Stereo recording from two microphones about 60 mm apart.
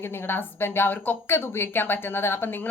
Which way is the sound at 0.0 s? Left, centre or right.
Left.